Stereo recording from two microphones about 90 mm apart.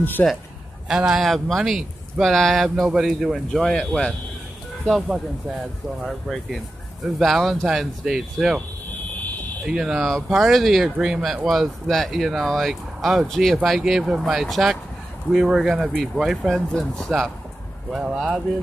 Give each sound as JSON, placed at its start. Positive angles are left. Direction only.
{"t": 0.0, "sound": "a man's voice", "side_deg": 20}
{"t": 0.8, "sound": "speech", "side_deg": -5}
{"t": 5.0, "sound": "speech", "side_deg": -5}
{"t": 9.7, "sound": "speech", "side_deg": -5}